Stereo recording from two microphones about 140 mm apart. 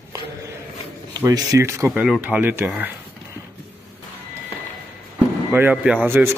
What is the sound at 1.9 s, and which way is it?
A man's voice, 5° right (ahead or behind).